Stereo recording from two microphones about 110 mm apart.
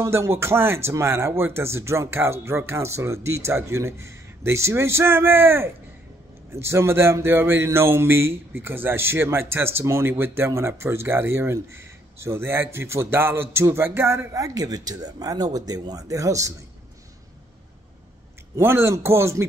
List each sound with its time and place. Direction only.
0.0 s speech: 25° right (ahead or behind)
18.6 s speech: 25° right (ahead or behind)